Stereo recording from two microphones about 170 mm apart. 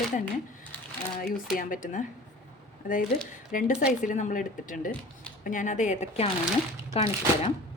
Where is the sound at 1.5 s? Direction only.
50° left (ahead or behind).